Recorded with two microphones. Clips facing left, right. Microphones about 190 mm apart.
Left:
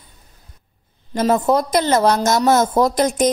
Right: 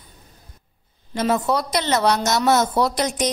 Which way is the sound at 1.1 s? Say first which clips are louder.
Left 4 dB; 45° left (ahead or behind).